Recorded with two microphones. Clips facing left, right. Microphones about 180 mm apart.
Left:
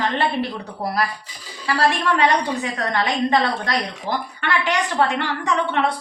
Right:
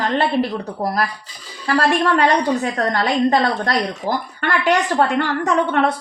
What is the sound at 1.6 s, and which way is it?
A woman's voice, 45° right (ahead or behind).